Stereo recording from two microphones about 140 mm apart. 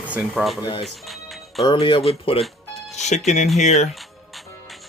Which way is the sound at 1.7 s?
35° left (ahead or behind).